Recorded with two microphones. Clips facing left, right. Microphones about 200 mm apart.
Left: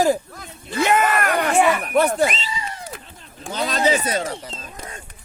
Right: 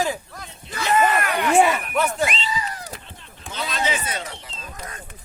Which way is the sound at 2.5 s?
25° left (ahead or behind).